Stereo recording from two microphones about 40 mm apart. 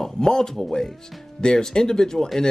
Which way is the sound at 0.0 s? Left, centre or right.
Centre.